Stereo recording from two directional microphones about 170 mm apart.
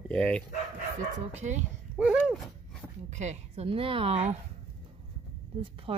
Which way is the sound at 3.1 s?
40° right (ahead or behind).